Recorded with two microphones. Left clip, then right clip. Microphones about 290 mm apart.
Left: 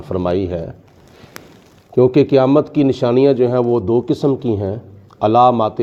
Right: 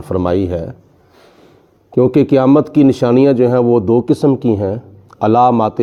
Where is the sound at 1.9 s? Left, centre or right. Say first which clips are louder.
Even; right.